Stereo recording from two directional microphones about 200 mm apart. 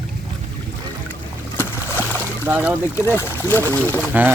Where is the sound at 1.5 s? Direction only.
10° left (ahead or behind).